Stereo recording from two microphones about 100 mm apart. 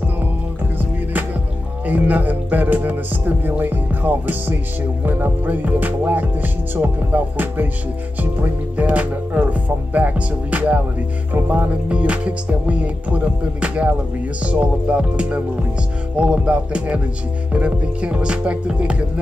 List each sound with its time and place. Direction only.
1.9 s music: 15° right (ahead or behind)